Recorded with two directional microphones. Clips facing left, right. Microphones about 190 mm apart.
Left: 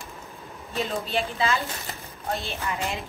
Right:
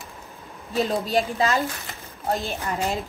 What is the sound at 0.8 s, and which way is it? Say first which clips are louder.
A woman's voice: right 5 dB; 35° right (ahead or behind).